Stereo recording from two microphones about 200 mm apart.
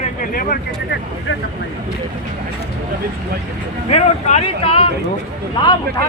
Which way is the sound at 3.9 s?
35° left (ahead or behind).